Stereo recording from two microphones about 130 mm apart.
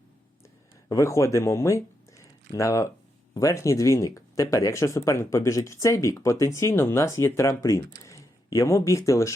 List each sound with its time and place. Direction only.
0.9 s speech: 25° left (ahead or behind)